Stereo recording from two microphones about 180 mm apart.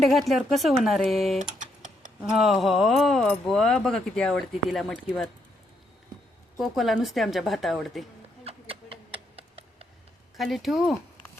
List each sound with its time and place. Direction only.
0.1 s speech: centre (ahead or behind)
1.5 s typing: 45° right (ahead or behind)
2.3 s speech: centre (ahead or behind)
6.6 s speech: centre (ahead or behind)
8.4 s a sound: 30° right (ahead or behind)
10.3 s speech: centre (ahead or behind)